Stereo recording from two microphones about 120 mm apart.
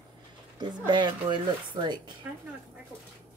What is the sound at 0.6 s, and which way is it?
Speech, 40° right (ahead or behind).